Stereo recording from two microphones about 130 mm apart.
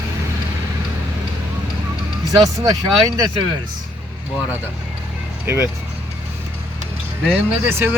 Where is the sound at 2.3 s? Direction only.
30° right (ahead or behind).